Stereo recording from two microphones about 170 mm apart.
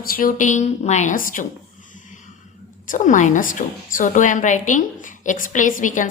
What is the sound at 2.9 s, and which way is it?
A woman's voice, 50° left (ahead or behind).